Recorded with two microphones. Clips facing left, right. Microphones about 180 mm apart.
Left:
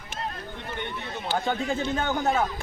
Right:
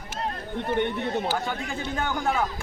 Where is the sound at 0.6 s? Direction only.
55° right (ahead or behind).